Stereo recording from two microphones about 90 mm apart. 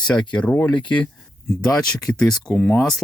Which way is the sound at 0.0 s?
10° left (ahead or behind).